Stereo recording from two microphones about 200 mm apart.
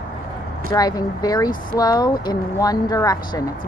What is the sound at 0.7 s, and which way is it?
A woman's voice, 20° left (ahead or behind).